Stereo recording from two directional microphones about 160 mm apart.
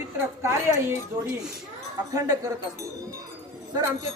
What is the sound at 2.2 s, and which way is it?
Speech, 20° right (ahead or behind).